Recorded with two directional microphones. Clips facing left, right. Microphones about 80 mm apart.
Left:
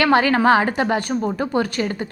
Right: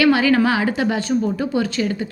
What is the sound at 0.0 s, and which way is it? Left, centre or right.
A woman's voice, left.